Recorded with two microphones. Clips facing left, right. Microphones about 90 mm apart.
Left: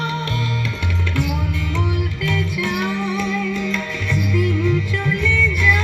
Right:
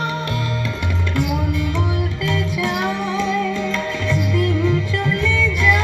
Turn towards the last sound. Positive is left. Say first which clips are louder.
# right 1 dB
turn(degrees=-20)  # may be behind; listen again after turning